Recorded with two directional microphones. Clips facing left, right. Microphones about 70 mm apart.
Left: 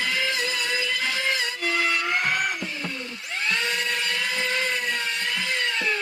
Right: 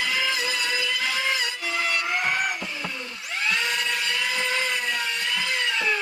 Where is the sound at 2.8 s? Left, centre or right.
Centre.